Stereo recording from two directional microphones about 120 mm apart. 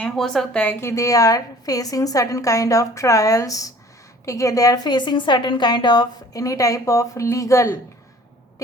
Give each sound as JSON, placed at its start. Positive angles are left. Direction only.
{"t": 0.0, "sound": "a woman's voice", "side_deg": 5}